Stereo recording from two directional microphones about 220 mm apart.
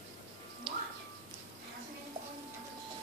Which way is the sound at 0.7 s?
20° right (ahead or behind).